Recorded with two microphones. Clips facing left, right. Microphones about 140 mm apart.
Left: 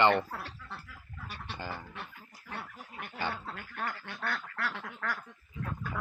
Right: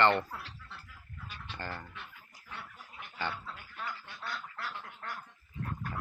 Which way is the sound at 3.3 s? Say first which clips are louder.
Left 3 dB; 55° left (ahead or behind).